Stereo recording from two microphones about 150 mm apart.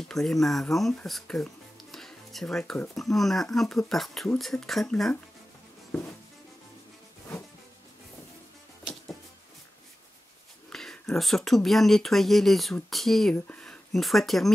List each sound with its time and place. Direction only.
0.1 s speech: centre (ahead or behind)
5.9 s music: 15° left (ahead or behind)
10.7 s speech: 5° left (ahead or behind)